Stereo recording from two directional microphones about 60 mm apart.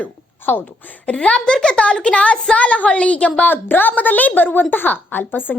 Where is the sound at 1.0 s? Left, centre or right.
Centre.